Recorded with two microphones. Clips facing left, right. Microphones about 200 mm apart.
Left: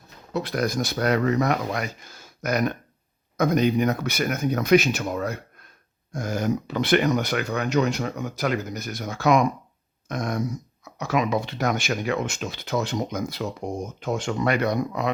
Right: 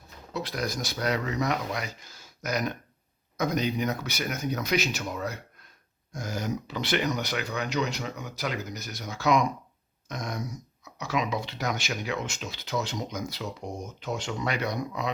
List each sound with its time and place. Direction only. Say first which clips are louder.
0.3 s speech: left 7 dB; 55° left (ahead or behind)